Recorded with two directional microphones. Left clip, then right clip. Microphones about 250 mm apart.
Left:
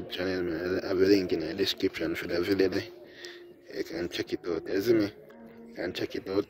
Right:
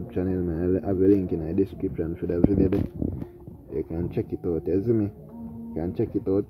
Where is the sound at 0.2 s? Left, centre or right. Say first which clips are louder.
Right 4 dB; centre.